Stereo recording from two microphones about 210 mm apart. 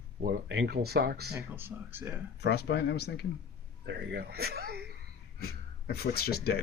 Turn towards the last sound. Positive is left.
turn(degrees=50)  # may be behind; listen again after turning